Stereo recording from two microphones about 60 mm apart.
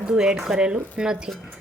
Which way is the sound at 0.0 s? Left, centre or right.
Centre.